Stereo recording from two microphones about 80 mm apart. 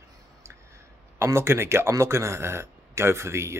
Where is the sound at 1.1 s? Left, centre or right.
Right.